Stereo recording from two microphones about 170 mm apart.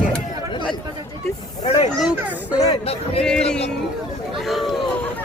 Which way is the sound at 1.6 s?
35° left (ahead or behind).